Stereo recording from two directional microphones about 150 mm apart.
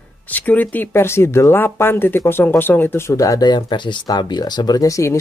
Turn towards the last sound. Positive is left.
turn(degrees=20)  # may be behind; listen again after turning